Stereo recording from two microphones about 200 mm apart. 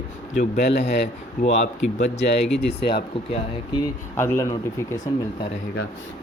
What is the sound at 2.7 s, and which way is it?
Speech, 25° left (ahead or behind).